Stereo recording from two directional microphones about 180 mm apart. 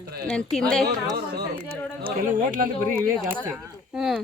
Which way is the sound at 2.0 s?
50° right (ahead or behind).